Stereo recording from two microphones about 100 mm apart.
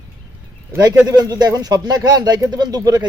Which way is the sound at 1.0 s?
40° right (ahead or behind).